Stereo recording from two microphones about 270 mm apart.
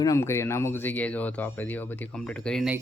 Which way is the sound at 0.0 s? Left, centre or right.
Centre.